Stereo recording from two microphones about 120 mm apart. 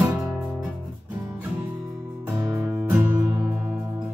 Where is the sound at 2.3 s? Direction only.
25° right (ahead or behind).